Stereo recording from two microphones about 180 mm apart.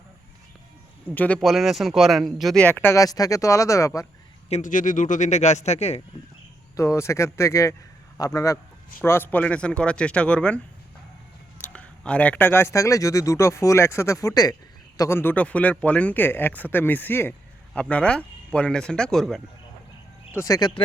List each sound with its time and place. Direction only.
1.1 s speech: 10° left (ahead or behind)
4.4 s speech: 40° left (ahead or behind)
6.7 s speech: 15° left (ahead or behind)
11.7 s speech: 5° left (ahead or behind)
20.3 s speech: 20° left (ahead or behind)